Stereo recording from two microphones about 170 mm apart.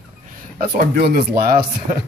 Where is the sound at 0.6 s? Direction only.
65° right (ahead or behind).